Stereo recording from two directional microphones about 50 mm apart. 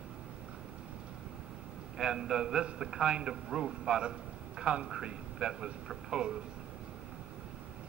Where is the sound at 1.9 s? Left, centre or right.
Centre.